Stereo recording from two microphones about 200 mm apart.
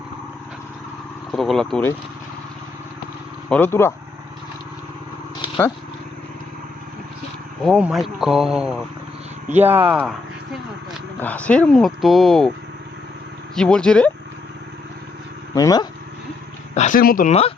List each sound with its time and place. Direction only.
1.3 s speech: centre (ahead or behind)
3.5 s speech: 10° left (ahead or behind)
7.6 s speech: centre (ahead or behind)
11.2 s speech: 5° left (ahead or behind)
13.6 s speech: 5° left (ahead or behind)
15.5 s speech: 20° left (ahead or behind)
16.7 s speech: 40° left (ahead or behind)